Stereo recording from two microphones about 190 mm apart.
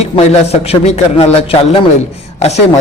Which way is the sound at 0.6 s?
35° left (ahead or behind).